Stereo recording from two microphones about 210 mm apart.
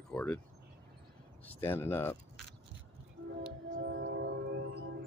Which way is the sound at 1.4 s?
10° left (ahead or behind).